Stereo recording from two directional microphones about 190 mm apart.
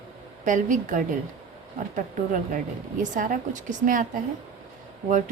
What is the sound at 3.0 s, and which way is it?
A woman's voice, 40° right (ahead or behind).